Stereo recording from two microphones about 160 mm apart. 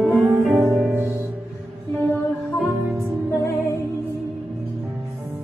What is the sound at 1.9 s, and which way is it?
Music, 10° left (ahead or behind).